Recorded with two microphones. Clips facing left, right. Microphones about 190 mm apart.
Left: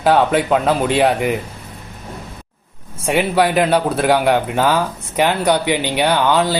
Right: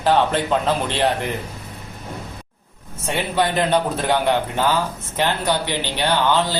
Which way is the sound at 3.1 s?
10° left (ahead or behind).